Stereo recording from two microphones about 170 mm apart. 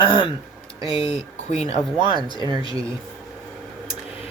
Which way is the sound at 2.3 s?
25° right (ahead or behind).